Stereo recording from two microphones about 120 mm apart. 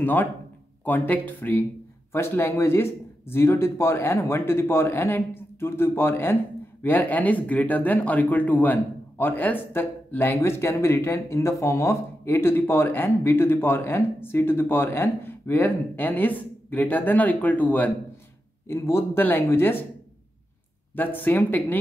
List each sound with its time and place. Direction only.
0.0 s speech: 15° left (ahead or behind)
20.9 s speech: 15° left (ahead or behind)